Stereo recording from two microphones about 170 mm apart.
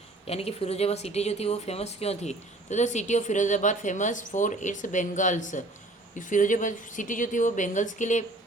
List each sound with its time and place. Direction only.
0.3 s speech: 35° left (ahead or behind)